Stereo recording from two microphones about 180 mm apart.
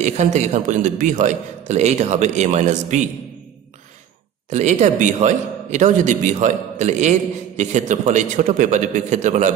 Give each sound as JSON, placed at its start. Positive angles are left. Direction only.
{"t": 0.0, "sound": "a man's voice", "side_deg": -40}
{"t": 4.5, "sound": "a man's voice", "side_deg": -40}